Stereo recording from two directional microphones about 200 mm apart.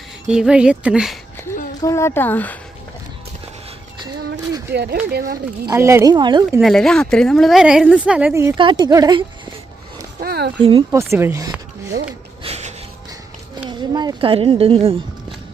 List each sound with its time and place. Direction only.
0.3 s a woman's voice: 5° right (ahead or behind)
1.5 s a sound: 10° left (ahead or behind)
1.8 s speech: 15° left (ahead or behind)
4.0 s a sound: 20° right (ahead or behind)
4.7 s speech: 55° right (ahead or behind)
5.6 s speech: 15° right (ahead or behind)
6.6 s a woman's voice: centre (ahead or behind); by 9.2 s 20° right (ahead or behind)
10.2 s a sound: 50° right (ahead or behind)
10.6 s speech: 25° right (ahead or behind)
10.9 s speech: 15° right (ahead or behind)
11.9 s a sound: 30° right (ahead or behind)
13.7 s speech: 20° right (ahead or behind)